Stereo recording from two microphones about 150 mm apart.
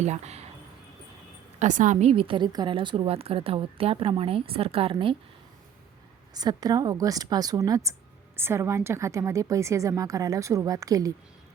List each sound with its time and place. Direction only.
0.0 s speech: 50° right (ahead or behind)
1.5 s a woman's voice: 55° right (ahead or behind); by 5.1 s 35° right (ahead or behind)
6.3 s a woman's voice: 25° right (ahead or behind)